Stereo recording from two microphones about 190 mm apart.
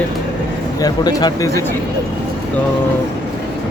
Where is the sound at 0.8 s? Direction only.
20° left (ahead or behind).